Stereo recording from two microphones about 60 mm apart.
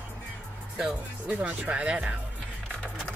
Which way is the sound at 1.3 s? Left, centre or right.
Right.